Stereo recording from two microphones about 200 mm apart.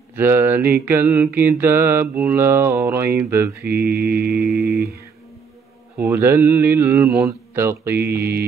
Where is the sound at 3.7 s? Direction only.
50° right (ahead or behind).